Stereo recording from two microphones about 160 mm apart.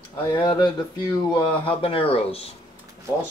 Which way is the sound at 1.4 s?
10° left (ahead or behind).